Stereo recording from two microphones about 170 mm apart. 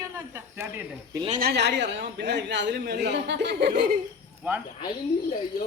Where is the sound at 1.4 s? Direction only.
75° right (ahead or behind).